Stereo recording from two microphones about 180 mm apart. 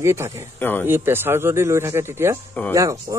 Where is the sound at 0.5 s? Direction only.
10° left (ahead or behind).